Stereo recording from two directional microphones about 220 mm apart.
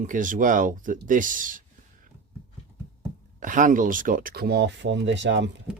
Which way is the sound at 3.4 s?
35° right (ahead or behind).